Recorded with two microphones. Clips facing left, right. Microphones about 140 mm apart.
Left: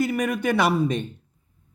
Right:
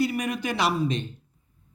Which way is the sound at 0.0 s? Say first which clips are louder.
Left 3 dB; 50° left (ahead or behind).